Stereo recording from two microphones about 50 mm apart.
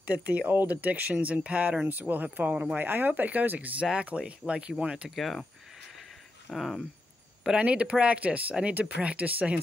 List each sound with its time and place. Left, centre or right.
0.0 s speech: right
1.9 s speech: right
2.5 s speech: right
2.8 s speech: right
3.9 s speech: right
5.1 s speech: centre
6.5 s speech: centre
7.5 s speech: right